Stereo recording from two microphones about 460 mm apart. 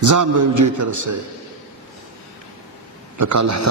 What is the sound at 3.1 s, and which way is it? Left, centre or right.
Speech, right.